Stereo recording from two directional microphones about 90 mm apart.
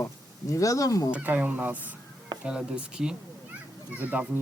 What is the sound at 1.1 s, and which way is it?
Speech, 15° right (ahead or behind).